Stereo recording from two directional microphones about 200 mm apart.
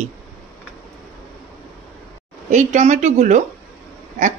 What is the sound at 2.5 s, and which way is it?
Speech, 35° right (ahead or behind).